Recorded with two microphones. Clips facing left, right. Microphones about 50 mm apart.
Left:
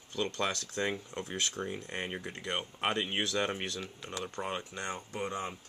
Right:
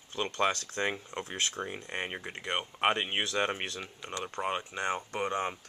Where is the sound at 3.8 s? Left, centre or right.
Centre.